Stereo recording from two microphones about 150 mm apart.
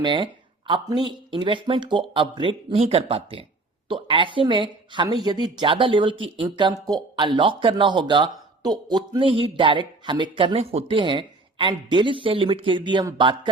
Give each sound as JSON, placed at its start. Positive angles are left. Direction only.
{"t": 0.0, "sound": "speech", "side_deg": -30}